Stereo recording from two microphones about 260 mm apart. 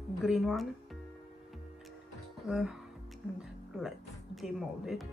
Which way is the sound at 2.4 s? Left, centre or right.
Centre.